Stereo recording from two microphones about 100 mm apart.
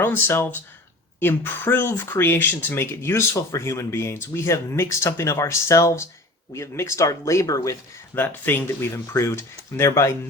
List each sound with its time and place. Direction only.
0.0 s speech: 20° left (ahead or behind)
8.1 s speech: 20° left (ahead or behind)